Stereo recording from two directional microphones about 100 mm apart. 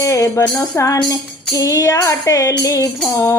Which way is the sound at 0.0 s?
30° left (ahead or behind).